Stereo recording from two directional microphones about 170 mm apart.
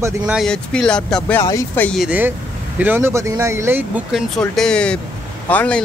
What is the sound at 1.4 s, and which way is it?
Speech, 15° left (ahead or behind).